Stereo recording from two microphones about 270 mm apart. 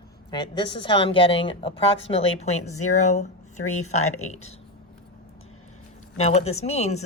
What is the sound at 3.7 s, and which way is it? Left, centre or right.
Speech, left.